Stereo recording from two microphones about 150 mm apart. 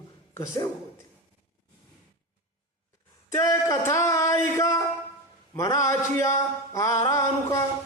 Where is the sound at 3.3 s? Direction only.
20° left (ahead or behind).